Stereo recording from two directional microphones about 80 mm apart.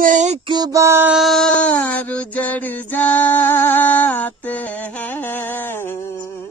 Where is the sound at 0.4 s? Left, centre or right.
Right.